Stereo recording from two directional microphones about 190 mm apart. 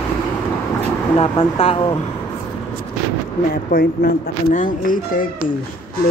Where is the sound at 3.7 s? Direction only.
45° left (ahead or behind).